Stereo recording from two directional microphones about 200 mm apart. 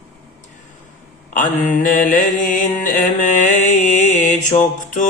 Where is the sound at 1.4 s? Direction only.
40° left (ahead or behind).